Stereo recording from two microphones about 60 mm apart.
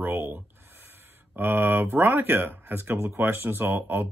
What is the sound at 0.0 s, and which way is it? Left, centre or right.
Speech, right.